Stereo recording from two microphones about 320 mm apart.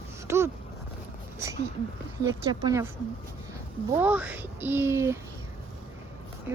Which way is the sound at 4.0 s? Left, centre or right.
Centre.